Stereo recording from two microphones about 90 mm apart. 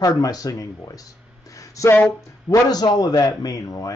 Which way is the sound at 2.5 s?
45° left (ahead or behind).